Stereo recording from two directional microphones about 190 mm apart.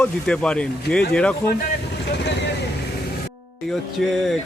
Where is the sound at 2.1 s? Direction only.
65° left (ahead or behind).